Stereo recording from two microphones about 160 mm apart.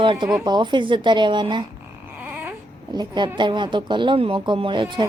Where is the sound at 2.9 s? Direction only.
30° right (ahead or behind).